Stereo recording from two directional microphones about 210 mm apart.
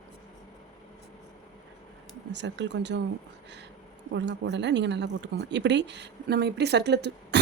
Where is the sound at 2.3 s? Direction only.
55° right (ahead or behind).